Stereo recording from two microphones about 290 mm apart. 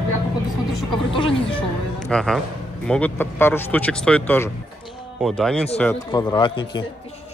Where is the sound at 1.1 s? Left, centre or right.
Centre.